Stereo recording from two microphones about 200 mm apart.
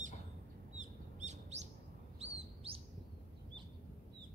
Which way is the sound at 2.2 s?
30° right (ahead or behind).